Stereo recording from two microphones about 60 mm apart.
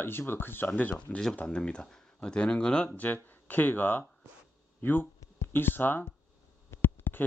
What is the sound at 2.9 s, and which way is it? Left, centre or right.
Speech, left.